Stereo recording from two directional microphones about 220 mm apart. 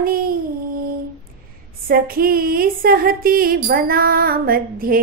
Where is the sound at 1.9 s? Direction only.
40° right (ahead or behind).